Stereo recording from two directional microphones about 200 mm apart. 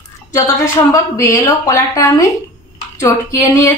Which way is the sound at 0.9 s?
15° left (ahead or behind).